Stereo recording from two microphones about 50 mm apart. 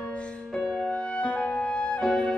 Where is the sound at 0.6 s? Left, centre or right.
Centre.